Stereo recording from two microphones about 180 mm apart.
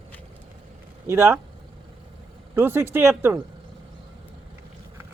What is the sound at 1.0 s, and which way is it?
Speech, 15° right (ahead or behind).